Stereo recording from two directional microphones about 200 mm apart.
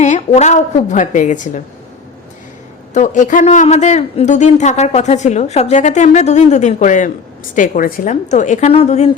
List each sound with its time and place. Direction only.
0.0 s a man's voice: 35° left (ahead or behind)
2.9 s a man's voice: 40° left (ahead or behind)